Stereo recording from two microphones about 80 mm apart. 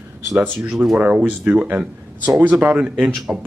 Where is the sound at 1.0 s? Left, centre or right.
Centre.